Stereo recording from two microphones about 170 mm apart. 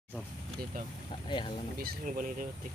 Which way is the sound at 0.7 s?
60° right (ahead or behind).